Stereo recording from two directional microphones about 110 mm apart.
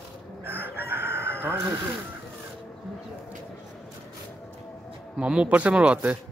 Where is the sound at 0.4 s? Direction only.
20° right (ahead or behind).